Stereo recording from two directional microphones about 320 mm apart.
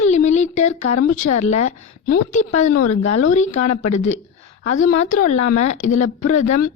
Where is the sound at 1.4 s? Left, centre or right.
Left.